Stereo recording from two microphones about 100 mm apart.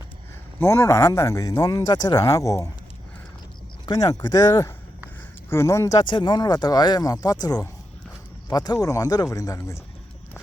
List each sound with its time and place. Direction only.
0.6 s speech: 30° left (ahead or behind)
3.8 s speech: 35° left (ahead or behind)
5.5 s speech: 25° left (ahead or behind)
6.1 s speech: 50° left (ahead or behind); by 9.8 s 30° left (ahead or behind)